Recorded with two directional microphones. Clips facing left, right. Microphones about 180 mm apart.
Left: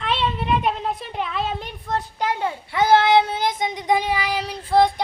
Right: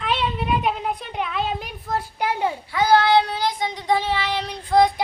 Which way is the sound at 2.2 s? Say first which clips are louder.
Right 2 dB; 15° right (ahead or behind).